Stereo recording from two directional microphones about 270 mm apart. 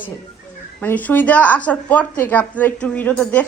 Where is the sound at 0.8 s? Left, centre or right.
Centre.